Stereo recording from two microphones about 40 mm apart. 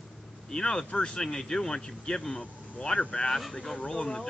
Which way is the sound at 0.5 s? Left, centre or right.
Centre.